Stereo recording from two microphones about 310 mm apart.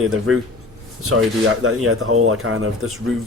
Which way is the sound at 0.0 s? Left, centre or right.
Right.